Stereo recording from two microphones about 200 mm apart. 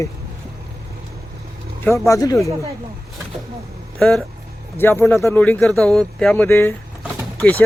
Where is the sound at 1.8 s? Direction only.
15° left (ahead or behind).